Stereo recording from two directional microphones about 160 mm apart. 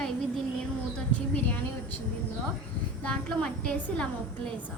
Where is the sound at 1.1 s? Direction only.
10° left (ahead or behind).